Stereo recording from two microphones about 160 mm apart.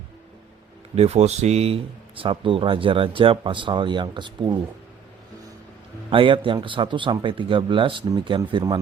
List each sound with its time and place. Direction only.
0.9 s speech: 40° right (ahead or behind)
6.1 s speech: 35° right (ahead or behind)